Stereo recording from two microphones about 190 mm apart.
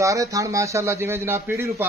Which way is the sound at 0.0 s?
15° right (ahead or behind).